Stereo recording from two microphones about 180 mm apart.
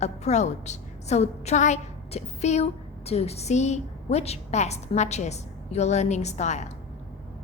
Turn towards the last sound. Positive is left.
turn(degrees=40)  # may be behind; listen again after turning